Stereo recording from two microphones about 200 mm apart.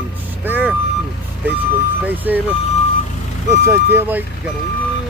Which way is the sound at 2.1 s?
10° right (ahead or behind).